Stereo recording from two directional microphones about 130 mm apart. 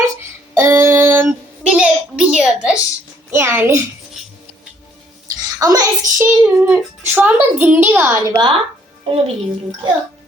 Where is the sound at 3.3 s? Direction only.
20° right (ahead or behind).